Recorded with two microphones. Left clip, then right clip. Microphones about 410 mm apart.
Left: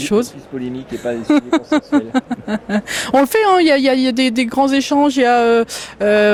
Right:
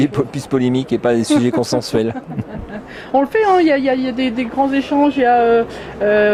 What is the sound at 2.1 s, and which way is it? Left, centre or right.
A woman's voice, left.